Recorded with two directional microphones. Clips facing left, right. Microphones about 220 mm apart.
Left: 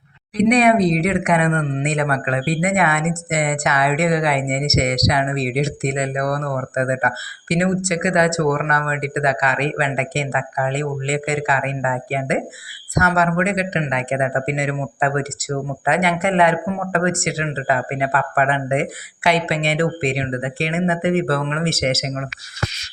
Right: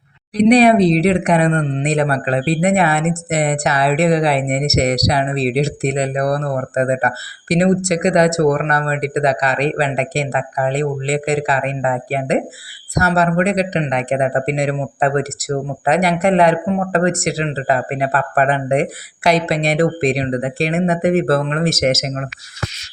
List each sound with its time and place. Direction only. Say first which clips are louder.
0.3 s speech: right 4 dB; 35° right (ahead or behind)